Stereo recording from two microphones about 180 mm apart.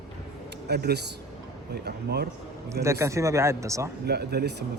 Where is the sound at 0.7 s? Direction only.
65° right (ahead or behind).